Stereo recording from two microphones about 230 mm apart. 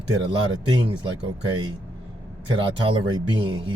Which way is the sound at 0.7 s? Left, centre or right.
Centre.